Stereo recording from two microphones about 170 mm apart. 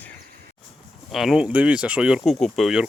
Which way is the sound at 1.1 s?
Centre (ahead or behind).